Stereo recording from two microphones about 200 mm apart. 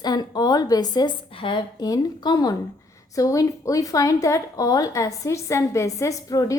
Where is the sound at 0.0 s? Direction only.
20° left (ahead or behind).